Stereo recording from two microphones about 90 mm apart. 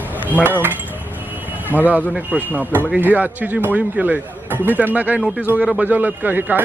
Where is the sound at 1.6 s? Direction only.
20° left (ahead or behind).